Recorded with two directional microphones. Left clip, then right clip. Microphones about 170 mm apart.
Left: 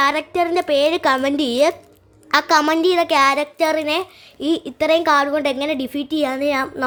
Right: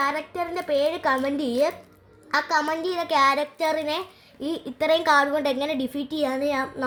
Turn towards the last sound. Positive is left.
turn(degrees=30)  # may be behind; listen again after turning